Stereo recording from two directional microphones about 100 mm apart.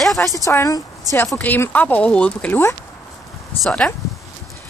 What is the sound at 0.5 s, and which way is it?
A woman's voice, 35° left (ahead or behind).